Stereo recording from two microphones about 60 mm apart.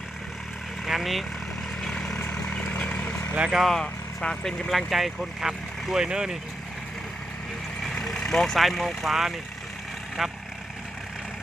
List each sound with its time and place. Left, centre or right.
0.9 s vehicle: centre; by 3.2 s left
3.3 s speech: centre
3.6 s speech: centre
4.7 s speech: centre
7.8 s speech: centre